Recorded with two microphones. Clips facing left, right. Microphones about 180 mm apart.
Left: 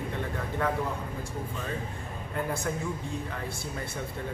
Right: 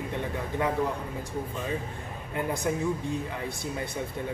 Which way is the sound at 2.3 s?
15° right (ahead or behind).